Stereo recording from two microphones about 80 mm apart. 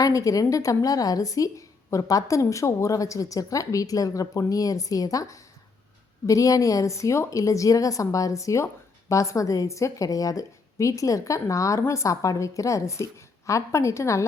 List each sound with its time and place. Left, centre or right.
0.0 s a woman's voice: left